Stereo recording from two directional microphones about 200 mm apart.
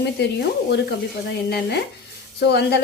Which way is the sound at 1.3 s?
55° left (ahead or behind).